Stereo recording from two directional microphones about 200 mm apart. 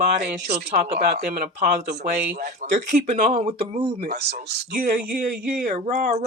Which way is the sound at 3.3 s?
30° right (ahead or behind).